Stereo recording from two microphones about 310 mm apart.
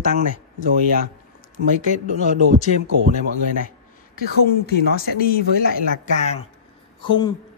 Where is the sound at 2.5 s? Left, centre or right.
Left.